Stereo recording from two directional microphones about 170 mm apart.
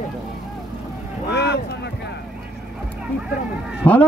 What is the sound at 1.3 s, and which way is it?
Speech, 75° left (ahead or behind).